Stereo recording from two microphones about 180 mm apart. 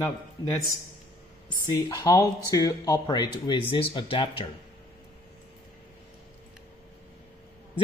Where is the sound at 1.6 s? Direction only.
20° left (ahead or behind).